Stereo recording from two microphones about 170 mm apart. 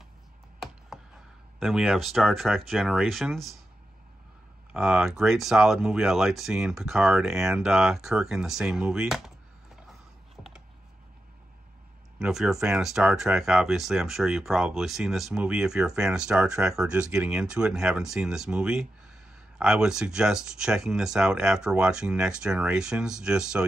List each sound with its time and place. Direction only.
1.6 s speech: centre (ahead or behind)
4.7 s speech: centre (ahead or behind)
12.2 s speech: centre (ahead or behind)